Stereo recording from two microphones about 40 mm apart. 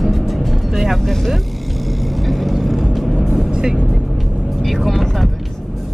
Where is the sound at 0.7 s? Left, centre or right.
Centre.